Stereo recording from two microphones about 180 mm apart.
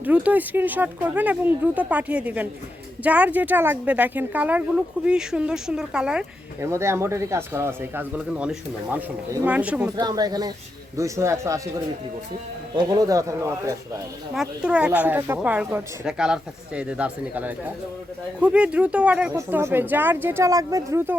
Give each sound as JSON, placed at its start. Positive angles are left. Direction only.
{"t": 0.0, "sound": "speech", "side_deg": -10}
{"t": 6.6, "sound": "speech", "side_deg": -15}
{"t": 9.9, "sound": "speech", "side_deg": -20}
{"t": 12.7, "sound": "speech", "side_deg": -20}
{"t": 14.3, "sound": "speech", "side_deg": -5}